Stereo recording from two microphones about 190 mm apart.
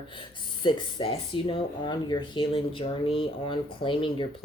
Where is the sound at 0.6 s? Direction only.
25° left (ahead or behind).